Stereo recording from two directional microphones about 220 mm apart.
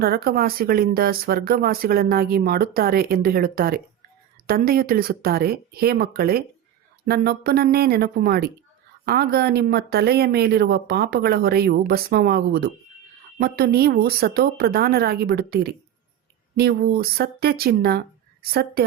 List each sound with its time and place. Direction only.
0.0 s speech: 45° right (ahead or behind)